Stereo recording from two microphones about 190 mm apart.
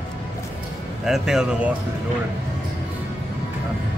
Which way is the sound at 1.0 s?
5° right (ahead or behind).